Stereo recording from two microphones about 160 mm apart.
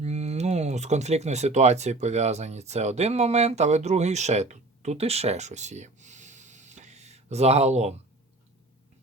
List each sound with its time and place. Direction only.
0.0 s speech: 45° right (ahead or behind)